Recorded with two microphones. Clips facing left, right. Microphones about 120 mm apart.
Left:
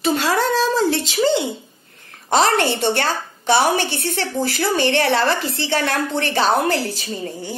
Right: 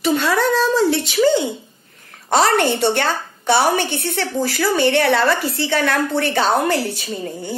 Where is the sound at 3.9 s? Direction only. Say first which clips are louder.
Right 1 dB; 55° left (ahead or behind).